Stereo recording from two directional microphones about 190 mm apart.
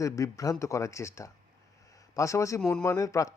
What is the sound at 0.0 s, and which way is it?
Speech, 15° left (ahead or behind).